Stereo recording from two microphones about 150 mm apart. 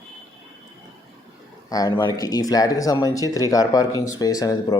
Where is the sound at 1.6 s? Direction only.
25° left (ahead or behind).